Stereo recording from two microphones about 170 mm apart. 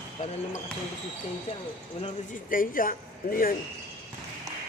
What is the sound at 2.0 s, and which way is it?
Speech, 40° left (ahead or behind).